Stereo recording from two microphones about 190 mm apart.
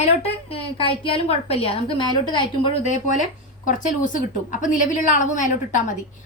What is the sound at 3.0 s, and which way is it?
A woman's voice, 40° left (ahead or behind).